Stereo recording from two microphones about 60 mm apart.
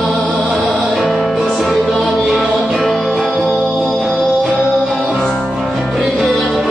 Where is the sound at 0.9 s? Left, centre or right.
Centre.